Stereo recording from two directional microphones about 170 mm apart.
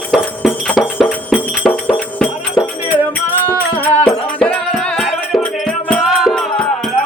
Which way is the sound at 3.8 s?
10° left (ahead or behind).